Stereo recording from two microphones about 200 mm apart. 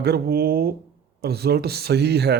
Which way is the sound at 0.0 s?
55° right (ahead or behind).